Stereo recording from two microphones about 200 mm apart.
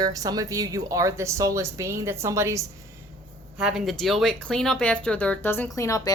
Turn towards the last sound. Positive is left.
turn(degrees=15)  # may be behind; listen again after turning